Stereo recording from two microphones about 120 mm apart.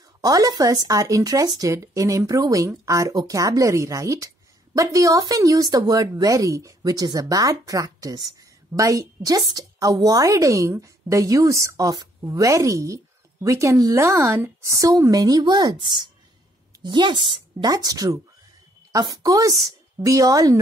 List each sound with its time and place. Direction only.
0.2 s speech: 30° right (ahead or behind)